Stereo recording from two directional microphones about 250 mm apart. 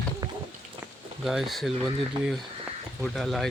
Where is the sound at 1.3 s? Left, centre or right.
Centre.